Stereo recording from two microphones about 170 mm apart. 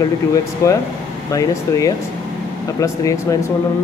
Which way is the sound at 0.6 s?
20° left (ahead or behind).